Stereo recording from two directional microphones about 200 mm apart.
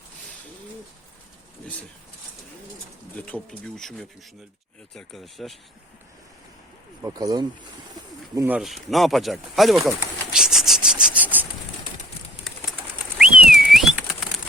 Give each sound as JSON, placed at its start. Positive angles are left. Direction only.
{"t": 3.2, "sound": "speech", "side_deg": 5}
{"t": 7.0, "sound": "speech", "side_deg": -20}
{"t": 8.4, "sound": "speech", "side_deg": -5}
{"t": 10.3, "sound": "a sound", "side_deg": 0}
{"t": 13.1, "sound": "whistling", "side_deg": -5}
{"t": 13.5, "sound": "a sound", "side_deg": 0}